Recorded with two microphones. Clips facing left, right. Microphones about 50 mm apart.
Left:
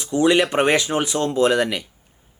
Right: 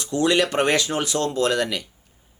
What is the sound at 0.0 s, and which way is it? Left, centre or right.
Speech, centre.